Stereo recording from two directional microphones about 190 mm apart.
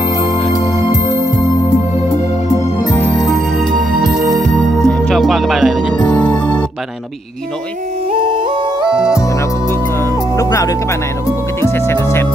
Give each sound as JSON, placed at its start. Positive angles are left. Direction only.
{"t": 2.9, "sound": "music", "side_deg": 5}
{"t": 4.8, "sound": "music", "side_deg": 5}
{"t": 8.1, "sound": "music", "side_deg": -25}
{"t": 8.9, "sound": "music", "side_deg": -5}
{"t": 10.3, "sound": "music", "side_deg": 15}